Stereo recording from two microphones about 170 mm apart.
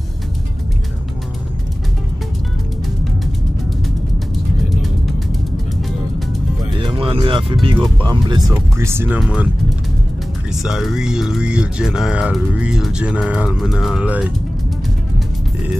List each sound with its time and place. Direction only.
5.8 s music: centre (ahead or behind)
6.9 s music: 30° right (ahead or behind)
7.6 s speech: 25° right (ahead or behind); by 9.5 s 5° right (ahead or behind)
10.5 s speech: centre (ahead or behind)